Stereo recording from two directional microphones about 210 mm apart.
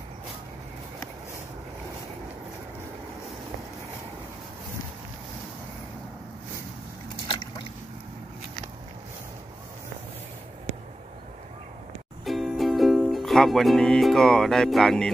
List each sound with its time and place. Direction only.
7.2 s boat: 20° left (ahead or behind)
12.3 s music: centre (ahead or behind)